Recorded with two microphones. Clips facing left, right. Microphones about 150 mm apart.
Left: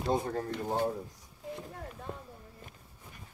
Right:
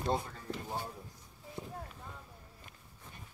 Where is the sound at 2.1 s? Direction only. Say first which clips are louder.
Left 9 dB; 80° left.